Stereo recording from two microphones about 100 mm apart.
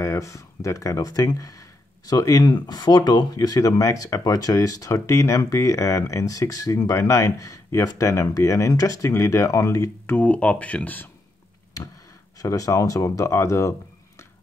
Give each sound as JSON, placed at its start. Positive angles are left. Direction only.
{"t": 0.0, "sound": "speech", "side_deg": 30}
{"t": 10.1, "sound": "speech", "side_deg": 15}
{"t": 12.4, "sound": "speech", "side_deg": 35}